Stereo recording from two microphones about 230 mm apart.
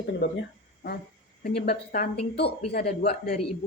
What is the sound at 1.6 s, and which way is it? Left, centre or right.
A woman's voice, left.